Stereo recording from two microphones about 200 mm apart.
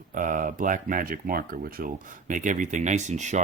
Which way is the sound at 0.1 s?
40° right (ahead or behind).